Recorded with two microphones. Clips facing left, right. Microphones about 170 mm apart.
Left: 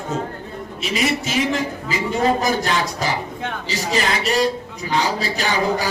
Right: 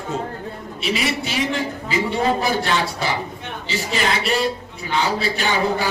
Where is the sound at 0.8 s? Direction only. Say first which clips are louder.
Left 1 dB; 40° left (ahead or behind).